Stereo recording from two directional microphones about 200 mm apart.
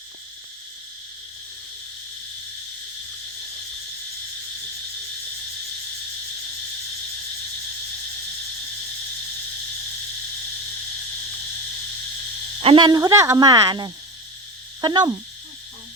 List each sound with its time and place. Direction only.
12.5 s speech: 25° right (ahead or behind)